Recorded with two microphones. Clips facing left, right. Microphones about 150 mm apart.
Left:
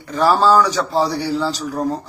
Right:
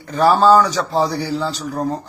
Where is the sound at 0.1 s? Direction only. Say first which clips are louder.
Right 2 dB; centre (ahead or behind).